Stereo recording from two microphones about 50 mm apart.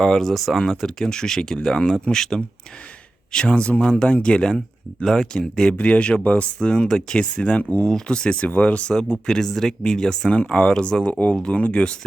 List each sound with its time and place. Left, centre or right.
0.0 s speech: centre
5.7 s speech: left
8.9 s speech: centre